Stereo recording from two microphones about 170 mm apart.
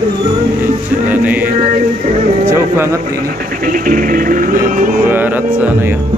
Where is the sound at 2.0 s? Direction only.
45° right (ahead or behind).